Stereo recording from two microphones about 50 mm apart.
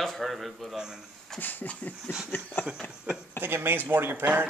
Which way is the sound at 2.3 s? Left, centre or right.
Left.